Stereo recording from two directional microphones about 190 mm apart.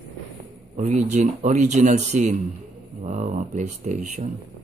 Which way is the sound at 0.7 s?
40° right (ahead or behind).